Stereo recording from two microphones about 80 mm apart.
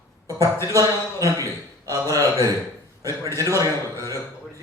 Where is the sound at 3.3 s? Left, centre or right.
Right.